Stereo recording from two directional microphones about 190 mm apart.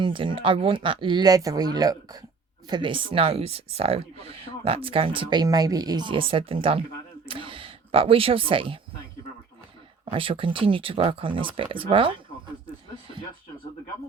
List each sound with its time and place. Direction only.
0.0 s speech: 25° right (ahead or behind)
10.1 s speech: 30° right (ahead or behind)